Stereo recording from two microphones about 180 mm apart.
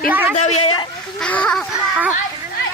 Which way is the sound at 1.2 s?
5° left (ahead or behind).